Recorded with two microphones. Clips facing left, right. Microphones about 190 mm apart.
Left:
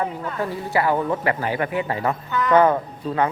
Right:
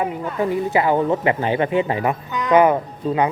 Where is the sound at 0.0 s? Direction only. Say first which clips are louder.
Right 4 dB; 15° right (ahead or behind).